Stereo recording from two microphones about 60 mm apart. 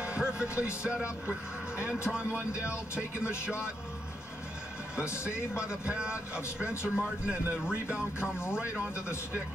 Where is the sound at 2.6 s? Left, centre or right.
Left.